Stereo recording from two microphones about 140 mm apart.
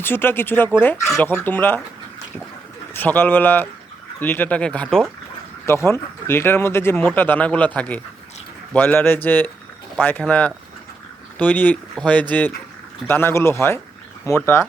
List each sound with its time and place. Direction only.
0.0 s speech: 15° left (ahead or behind)
2.9 s speech: 15° left (ahead or behind)
5.6 s speech: 20° left (ahead or behind)